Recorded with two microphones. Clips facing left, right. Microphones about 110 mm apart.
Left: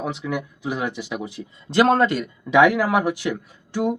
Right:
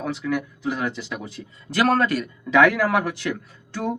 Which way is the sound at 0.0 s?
20° left (ahead or behind).